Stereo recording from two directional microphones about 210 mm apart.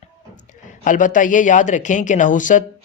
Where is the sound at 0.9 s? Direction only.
40° left (ahead or behind).